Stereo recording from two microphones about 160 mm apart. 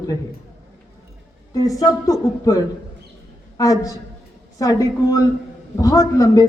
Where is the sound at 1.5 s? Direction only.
20° left (ahead or behind).